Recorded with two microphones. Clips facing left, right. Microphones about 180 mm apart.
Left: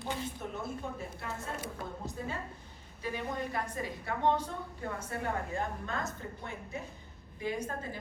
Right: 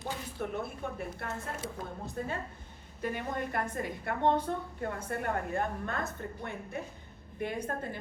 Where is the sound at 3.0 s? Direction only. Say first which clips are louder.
Right 2 dB; 55° right (ahead or behind).